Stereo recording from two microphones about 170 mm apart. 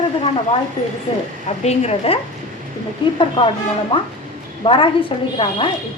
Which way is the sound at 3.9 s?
30° left (ahead or behind).